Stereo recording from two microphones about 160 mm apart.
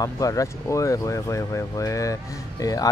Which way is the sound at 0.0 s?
20° left (ahead or behind).